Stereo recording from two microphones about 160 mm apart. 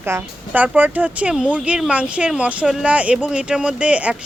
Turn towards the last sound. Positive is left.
turn(degrees=-10)  # may be behind; listen again after turning